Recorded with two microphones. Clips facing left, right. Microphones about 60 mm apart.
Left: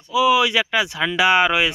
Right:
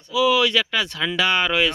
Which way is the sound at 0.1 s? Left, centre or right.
Centre.